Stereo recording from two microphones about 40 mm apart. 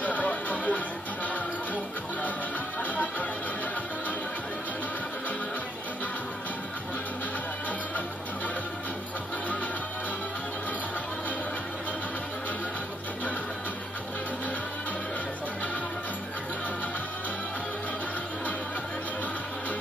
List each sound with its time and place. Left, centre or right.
0.0 s music: left